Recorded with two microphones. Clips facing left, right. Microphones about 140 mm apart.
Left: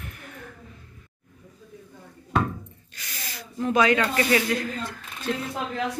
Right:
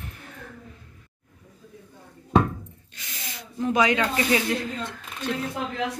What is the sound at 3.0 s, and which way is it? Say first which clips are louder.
Snake: left 1 dB; 20° right (ahead or behind).